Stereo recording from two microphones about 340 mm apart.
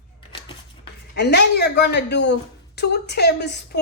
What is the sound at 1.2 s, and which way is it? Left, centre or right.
Speech, left.